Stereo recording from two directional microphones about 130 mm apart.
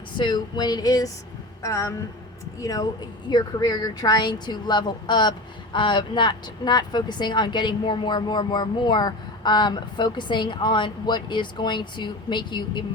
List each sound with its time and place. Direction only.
0.2 s speech: 35° left (ahead or behind)